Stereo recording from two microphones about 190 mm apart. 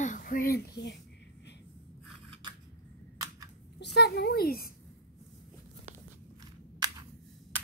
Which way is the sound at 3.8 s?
60° left (ahead or behind).